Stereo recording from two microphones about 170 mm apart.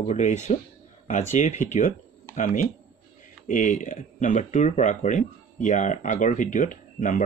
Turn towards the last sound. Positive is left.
turn(degrees=50)  # may be behind; listen again after turning